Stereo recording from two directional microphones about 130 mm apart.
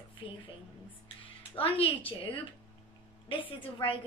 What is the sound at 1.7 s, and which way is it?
Speech, 45° left (ahead or behind).